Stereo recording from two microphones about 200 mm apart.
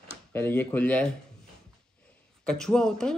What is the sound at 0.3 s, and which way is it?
Speech, 10° left (ahead or behind).